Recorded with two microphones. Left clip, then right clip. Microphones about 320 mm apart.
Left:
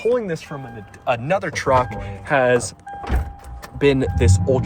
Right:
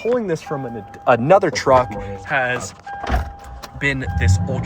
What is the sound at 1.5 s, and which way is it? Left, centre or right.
Speech, centre.